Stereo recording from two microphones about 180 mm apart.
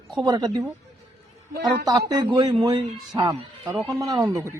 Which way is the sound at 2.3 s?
25° right (ahead or behind).